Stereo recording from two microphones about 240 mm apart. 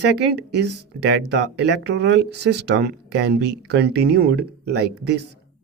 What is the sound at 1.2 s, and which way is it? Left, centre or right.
Speech, right.